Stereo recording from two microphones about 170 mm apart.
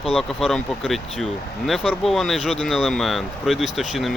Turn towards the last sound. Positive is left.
turn(degrees=0)  # may be behind; listen again after turning